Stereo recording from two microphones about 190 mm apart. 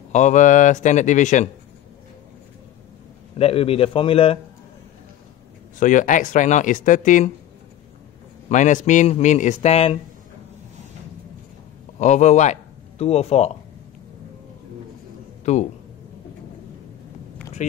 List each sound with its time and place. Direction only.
0.1 s speech: 40° left (ahead or behind)
3.3 s speech: 30° left (ahead or behind)
5.8 s speech: 40° left (ahead or behind)
8.5 s speech: 40° left (ahead or behind)
12.0 s a man's voice: 40° left (ahead or behind)
15.4 s speech: 35° left (ahead or behind)
17.6 s speech: 40° left (ahead or behind)